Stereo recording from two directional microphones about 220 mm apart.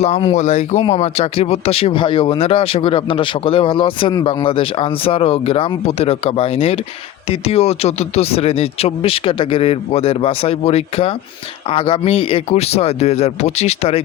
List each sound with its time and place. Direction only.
0.0 s speech: 25° left (ahead or behind)